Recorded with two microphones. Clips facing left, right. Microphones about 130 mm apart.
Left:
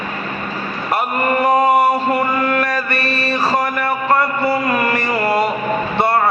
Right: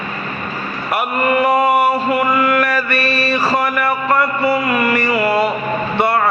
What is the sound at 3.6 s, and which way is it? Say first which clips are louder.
A man's voice: right 1 dB; 30° left (ahead or behind).